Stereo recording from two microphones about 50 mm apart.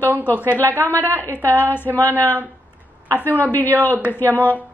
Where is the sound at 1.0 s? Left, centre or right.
Right.